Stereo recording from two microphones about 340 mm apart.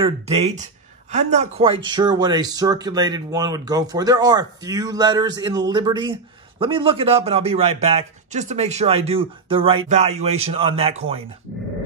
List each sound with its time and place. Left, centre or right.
0.0 s speech: centre